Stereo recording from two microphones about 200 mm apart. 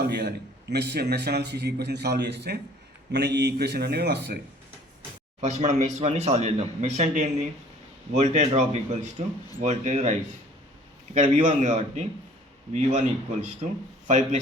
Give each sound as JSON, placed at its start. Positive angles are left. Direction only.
{"t": 0.0, "sound": "a man's voice", "side_deg": -55}
{"t": 5.4, "sound": "speech", "side_deg": -35}
{"t": 13.6, "sound": "speech", "side_deg": -35}